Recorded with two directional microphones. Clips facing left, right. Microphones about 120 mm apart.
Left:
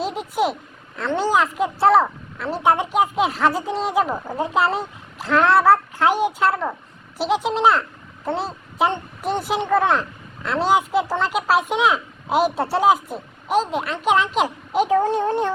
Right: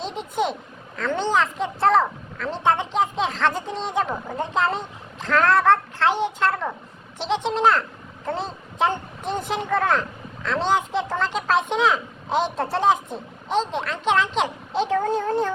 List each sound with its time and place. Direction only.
0.0 s a sound: 5° left (ahead or behind)
0.9 s a child's voice: 5° left (ahead or behind)
15.0 s speech: 25° left (ahead or behind)